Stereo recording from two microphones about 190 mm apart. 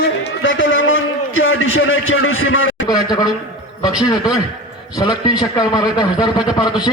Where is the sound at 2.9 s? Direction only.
20° left (ahead or behind).